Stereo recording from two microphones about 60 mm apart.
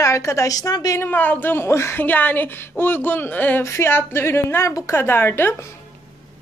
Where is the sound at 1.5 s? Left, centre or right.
Left.